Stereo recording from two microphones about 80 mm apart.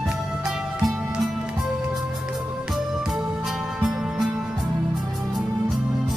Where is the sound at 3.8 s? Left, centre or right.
Centre.